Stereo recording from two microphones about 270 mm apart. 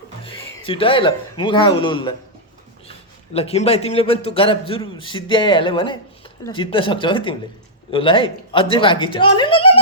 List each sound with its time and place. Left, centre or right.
0.2 s speech: centre
3.3 s a man's voice: left